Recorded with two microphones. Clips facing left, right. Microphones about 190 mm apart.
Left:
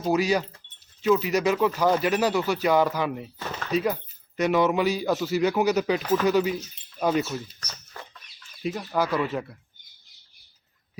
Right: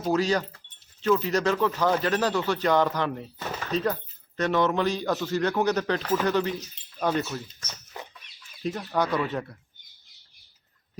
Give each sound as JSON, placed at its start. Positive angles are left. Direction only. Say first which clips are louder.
{"t": 0.1, "sound": "speech", "louder": "left 1 dB", "side_deg": 10}
{"t": 7.9, "sound": "chicken", "louder": "right 3 dB", "side_deg": -20}
{"t": 8.6, "sound": "speech", "louder": "left 1 dB", "side_deg": 5}